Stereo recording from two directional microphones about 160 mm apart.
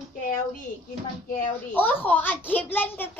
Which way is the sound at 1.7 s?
10° left (ahead or behind).